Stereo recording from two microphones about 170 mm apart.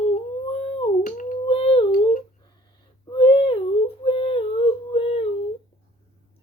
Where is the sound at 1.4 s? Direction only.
35° left (ahead or behind).